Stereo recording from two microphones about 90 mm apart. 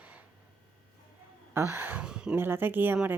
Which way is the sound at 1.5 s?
30° right (ahead or behind).